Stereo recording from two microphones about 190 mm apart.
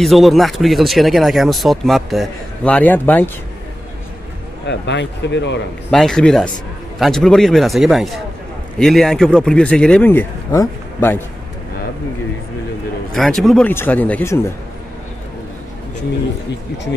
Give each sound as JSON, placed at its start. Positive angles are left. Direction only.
{"t": 0.0, "sound": "speech", "side_deg": 0}
{"t": 4.6, "sound": "speech", "side_deg": 65}
{"t": 5.9, "sound": "a man's voice", "side_deg": 5}
{"t": 13.1, "sound": "speech", "side_deg": 0}